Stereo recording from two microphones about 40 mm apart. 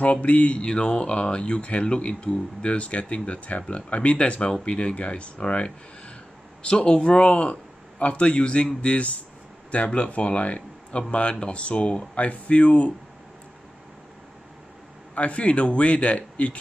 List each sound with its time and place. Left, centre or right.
0.0 s speech: left
15.1 s speech: left